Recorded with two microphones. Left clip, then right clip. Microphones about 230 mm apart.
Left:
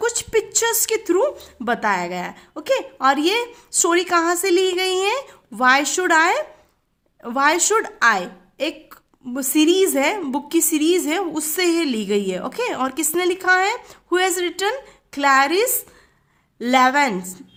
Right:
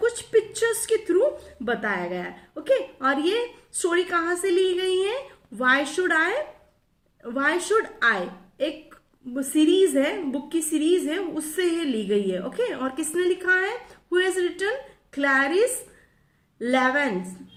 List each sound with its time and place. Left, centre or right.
0.0 s a woman's voice: left
16.7 s a woman's voice: left